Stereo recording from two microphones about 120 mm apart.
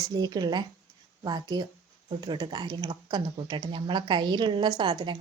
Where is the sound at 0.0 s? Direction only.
35° right (ahead or behind).